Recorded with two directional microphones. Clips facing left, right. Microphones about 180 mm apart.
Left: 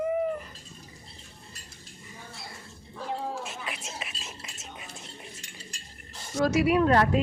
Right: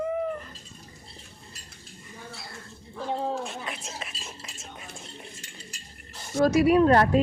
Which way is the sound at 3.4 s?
5° left (ahead or behind).